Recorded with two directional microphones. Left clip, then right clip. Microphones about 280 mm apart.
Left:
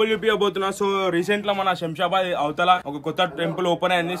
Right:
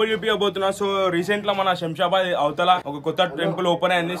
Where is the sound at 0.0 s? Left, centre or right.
Centre.